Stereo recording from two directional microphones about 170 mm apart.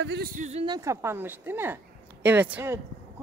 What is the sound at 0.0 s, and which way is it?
Speech, 85° right.